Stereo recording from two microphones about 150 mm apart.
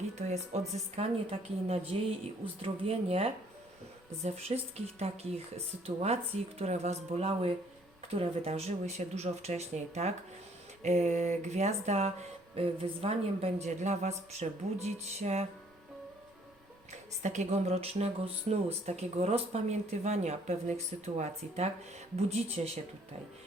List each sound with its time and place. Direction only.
0.2 s speech: 50° right (ahead or behind)
16.9 s speech: 50° right (ahead or behind)